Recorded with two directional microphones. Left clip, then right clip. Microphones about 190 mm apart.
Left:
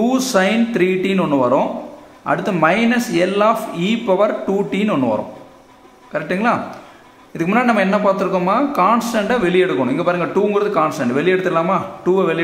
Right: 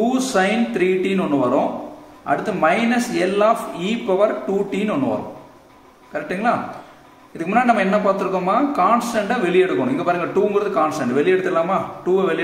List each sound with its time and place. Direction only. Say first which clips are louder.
0.0 s a man's voice: left 2 dB; 35° left (ahead or behind)
6.1 s a man's voice: left 3 dB; 35° left (ahead or behind)